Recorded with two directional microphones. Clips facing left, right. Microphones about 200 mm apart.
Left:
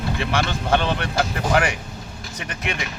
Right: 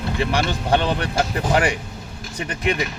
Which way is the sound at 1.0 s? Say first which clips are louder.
Right 1 dB; 30° right (ahead or behind).